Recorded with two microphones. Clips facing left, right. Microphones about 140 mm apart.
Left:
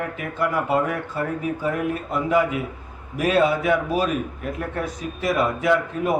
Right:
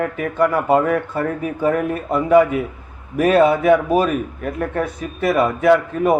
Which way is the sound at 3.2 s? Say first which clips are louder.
Right 6 dB; 50° right (ahead or behind).